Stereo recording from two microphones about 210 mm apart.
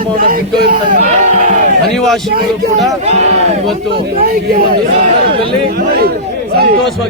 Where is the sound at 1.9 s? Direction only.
Centre (ahead or behind).